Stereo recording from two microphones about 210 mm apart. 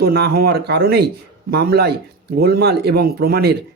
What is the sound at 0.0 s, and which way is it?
Speech, 50° right (ahead or behind).